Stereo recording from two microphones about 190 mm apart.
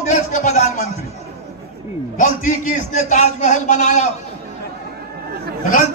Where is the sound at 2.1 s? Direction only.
40° left (ahead or behind).